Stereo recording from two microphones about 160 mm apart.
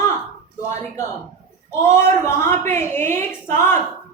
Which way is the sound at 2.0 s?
15° left (ahead or behind).